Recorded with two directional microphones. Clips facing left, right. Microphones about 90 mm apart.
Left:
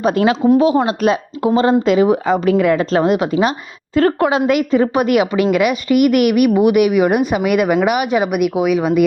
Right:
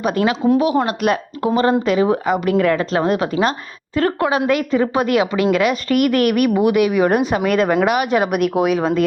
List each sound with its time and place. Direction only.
0.0 s a woman's voice: 30° left (ahead or behind)
3.9 s a woman's voice: 30° left (ahead or behind); by 8.8 s 5° left (ahead or behind)